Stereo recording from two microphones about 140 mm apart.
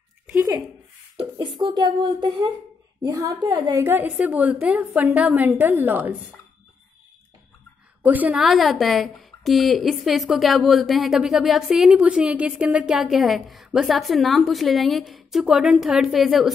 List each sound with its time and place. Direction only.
1.6 s speech: 35° right (ahead or behind)
3.1 s a woman's voice: 25° right (ahead or behind)
8.0 s a woman's voice: 10° right (ahead or behind)